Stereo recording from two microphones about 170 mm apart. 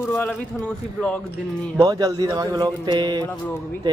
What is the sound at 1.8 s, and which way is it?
Speech, 20° right (ahead or behind).